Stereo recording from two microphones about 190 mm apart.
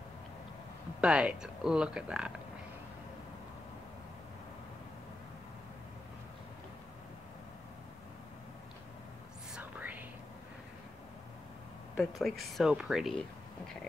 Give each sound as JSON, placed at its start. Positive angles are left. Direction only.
{"t": 1.0, "sound": "speech", "side_deg": -5}
{"t": 9.6, "sound": "whispering", "side_deg": -10}
{"t": 12.0, "sound": "speech", "side_deg": 0}